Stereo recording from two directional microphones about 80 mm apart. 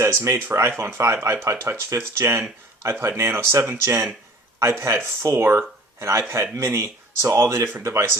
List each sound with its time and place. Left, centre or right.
0.0 s speech: right